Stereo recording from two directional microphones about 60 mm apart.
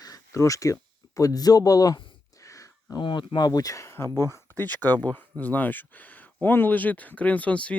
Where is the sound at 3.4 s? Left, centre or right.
Left.